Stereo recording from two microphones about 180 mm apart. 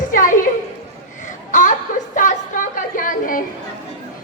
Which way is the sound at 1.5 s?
45° left (ahead or behind).